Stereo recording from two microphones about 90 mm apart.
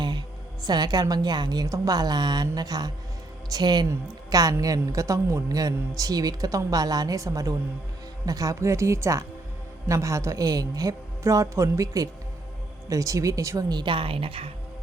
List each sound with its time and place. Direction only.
0.0 s a woman's voice: 55° right (ahead or behind); by 13.7 s 35° right (ahead or behind)
13.7 s a woman's voice: 50° right (ahead or behind)
13.9 s a woman's voice: 85° right